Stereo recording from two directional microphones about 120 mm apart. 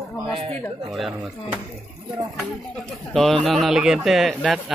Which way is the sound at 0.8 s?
Centre (ahead or behind).